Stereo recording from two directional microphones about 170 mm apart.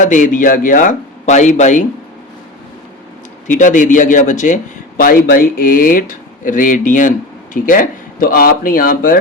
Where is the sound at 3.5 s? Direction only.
50° left (ahead or behind).